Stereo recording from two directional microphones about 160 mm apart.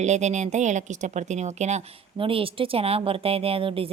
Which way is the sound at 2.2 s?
35° right (ahead or behind).